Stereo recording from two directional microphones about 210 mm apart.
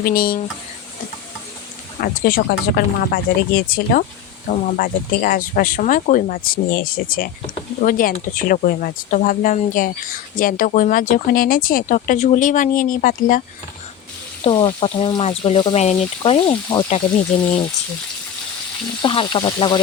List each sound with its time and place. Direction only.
0.0 s speech: 45° left (ahead or behind)
2.0 s speech: 45° left (ahead or behind)
14.4 s speech: 20° left (ahead or behind)
19.0 s speech: 20° left (ahead or behind)